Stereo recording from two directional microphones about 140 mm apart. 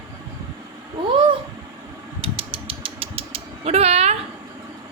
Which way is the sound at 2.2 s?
40° right (ahead or behind).